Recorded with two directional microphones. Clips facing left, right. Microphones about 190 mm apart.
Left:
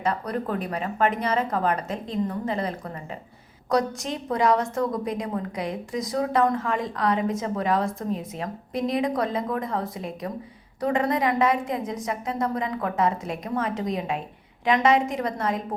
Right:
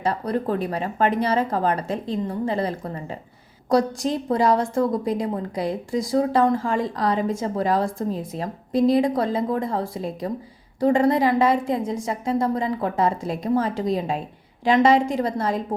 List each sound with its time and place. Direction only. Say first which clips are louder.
0.0 s a woman's voice: right 3 dB; 30° right (ahead or behind)